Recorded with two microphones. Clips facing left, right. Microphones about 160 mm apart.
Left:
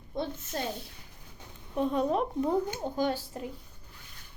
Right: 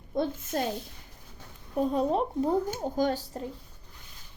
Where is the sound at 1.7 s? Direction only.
40° right (ahead or behind).